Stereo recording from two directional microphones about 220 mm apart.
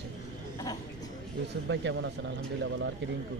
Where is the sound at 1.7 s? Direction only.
55° right (ahead or behind).